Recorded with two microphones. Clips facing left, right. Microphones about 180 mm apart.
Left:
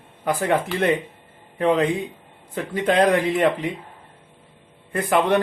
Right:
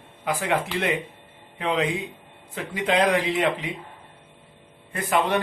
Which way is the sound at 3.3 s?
50° left (ahead or behind).